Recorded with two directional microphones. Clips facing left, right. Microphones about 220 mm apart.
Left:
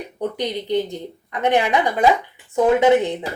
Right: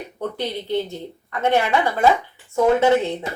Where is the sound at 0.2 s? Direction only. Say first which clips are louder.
Left 2 dB; 15° left (ahead or behind).